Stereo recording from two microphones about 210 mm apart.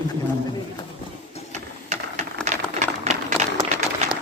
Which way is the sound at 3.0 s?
35° right (ahead or behind).